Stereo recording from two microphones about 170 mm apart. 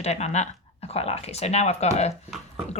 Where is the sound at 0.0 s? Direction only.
40° left (ahead or behind).